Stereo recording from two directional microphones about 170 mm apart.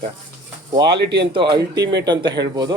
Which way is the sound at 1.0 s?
85° right.